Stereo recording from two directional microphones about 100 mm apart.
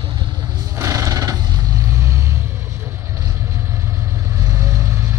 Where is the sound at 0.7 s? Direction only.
30° right (ahead or behind).